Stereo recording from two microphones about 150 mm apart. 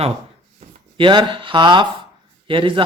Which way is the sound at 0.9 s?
30° right (ahead or behind).